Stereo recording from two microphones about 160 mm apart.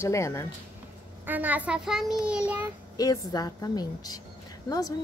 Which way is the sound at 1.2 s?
10° right (ahead or behind).